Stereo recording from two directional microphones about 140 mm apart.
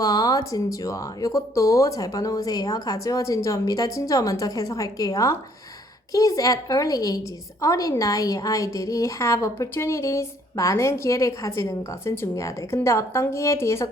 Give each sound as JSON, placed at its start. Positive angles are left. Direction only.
{"t": 0.0, "sound": "a woman's voice", "side_deg": 25}